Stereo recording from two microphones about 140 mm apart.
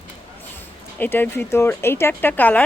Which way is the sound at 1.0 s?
15° left (ahead or behind).